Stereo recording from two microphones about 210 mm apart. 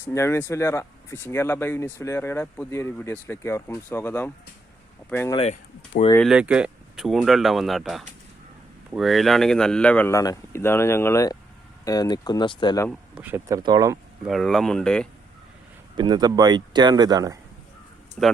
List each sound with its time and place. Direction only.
0.0 s speech: 15° left (ahead or behind)
6.1 s speech: centre (ahead or behind); by 12.9 s 20° left (ahead or behind)
12.9 s speech: 5° right (ahead or behind)
14.3 s speech: centre (ahead or behind)
16.0 s speech: 20° right (ahead or behind)
18.2 s speech: centre (ahead or behind)